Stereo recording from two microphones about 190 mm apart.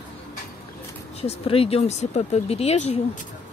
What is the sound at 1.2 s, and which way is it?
Speech, 30° left (ahead or behind).